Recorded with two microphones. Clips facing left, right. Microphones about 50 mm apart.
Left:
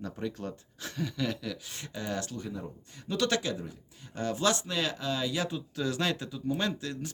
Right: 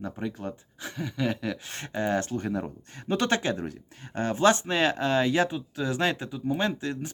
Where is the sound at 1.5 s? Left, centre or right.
Right.